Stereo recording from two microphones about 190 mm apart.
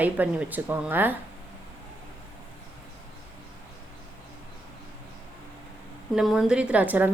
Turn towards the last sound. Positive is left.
turn(degrees=-10)  # may be behind; listen again after turning